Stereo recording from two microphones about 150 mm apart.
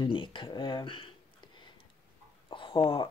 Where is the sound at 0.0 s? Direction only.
35° left (ahead or behind).